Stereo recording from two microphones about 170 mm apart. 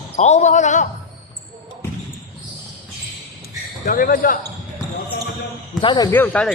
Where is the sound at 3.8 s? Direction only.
55° left (ahead or behind).